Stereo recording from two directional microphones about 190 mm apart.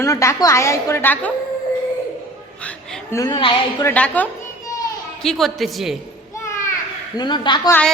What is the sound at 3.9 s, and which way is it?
A woman's voice, 10° left (ahead or behind).